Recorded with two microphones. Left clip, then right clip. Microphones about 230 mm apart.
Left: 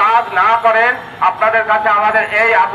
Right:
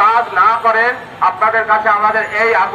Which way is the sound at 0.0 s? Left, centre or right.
Left.